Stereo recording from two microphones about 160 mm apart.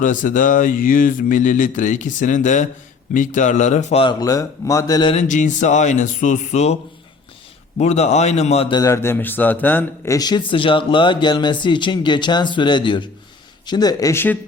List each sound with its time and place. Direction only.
0.0 s speech: 55° left (ahead or behind)
4.0 s speech: 20° left (ahead or behind)
5.1 s speech: 50° left (ahead or behind)
7.8 s speech: 45° left (ahead or behind)
8.7 s a man's voice: 20° left (ahead or behind)
10.2 s speech: 25° left (ahead or behind)